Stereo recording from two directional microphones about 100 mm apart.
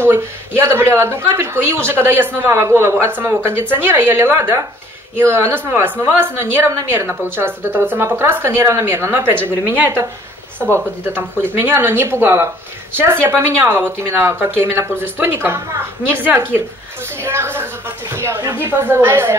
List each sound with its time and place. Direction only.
0.0 s a woman's voice: 25° right (ahead or behind)